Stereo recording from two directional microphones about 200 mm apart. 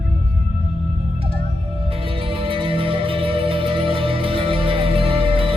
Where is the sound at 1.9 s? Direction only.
25° right (ahead or behind).